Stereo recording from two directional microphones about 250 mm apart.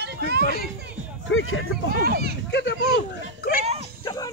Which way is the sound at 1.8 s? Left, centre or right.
Right.